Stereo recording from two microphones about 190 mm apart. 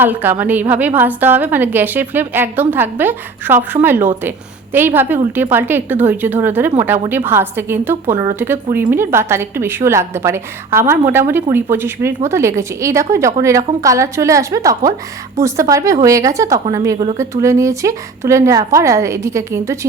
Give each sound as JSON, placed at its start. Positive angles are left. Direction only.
{"t": 0.0, "sound": "a woman's voice", "side_deg": -10}